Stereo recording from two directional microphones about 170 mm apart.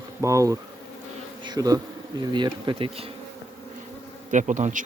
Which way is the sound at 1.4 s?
25° right (ahead or behind).